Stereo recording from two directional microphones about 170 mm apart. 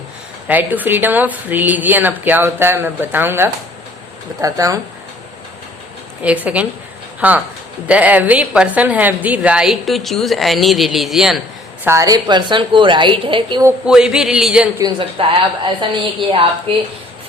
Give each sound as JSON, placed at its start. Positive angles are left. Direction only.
{"t": 0.4, "sound": "a woman's voice", "side_deg": -10}
{"t": 6.2, "sound": "a woman's voice", "side_deg": -10}
{"t": 11.9, "sound": "a woman's voice", "side_deg": -20}
{"t": 13.8, "sound": "a woman's voice", "side_deg": -5}
{"t": 14.8, "sound": "a woman's voice", "side_deg": -25}